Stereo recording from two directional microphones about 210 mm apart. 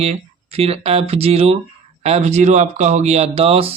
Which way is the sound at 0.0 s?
30° right (ahead or behind).